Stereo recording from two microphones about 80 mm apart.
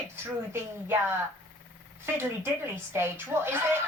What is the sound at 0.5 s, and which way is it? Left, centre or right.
Speech, right.